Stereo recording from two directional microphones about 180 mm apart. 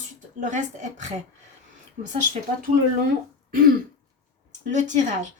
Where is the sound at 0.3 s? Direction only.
45° right (ahead or behind).